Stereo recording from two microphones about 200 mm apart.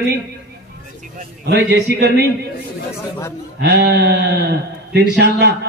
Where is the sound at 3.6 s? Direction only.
60° right (ahead or behind).